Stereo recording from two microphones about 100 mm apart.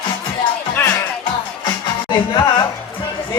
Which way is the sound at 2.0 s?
50° left (ahead or behind).